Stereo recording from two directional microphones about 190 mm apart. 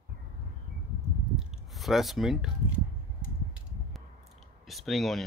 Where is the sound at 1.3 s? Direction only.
Centre (ahead or behind).